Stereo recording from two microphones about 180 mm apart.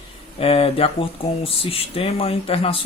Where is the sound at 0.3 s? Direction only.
30° left (ahead or behind).